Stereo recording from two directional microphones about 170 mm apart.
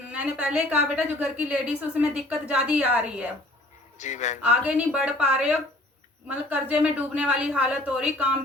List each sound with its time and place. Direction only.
0.1 s a woman's voice: 5° right (ahead or behind)
3.9 s speech: 45° left (ahead or behind)
4.4 s a woman's voice: 5° right (ahead or behind)